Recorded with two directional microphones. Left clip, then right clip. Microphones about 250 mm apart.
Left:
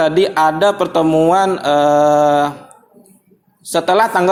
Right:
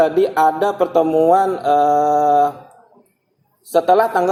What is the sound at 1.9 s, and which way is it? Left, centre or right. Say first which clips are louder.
Mantra: left 4 dB; left.